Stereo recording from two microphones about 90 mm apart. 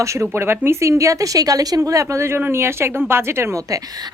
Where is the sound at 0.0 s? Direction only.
35° right (ahead or behind).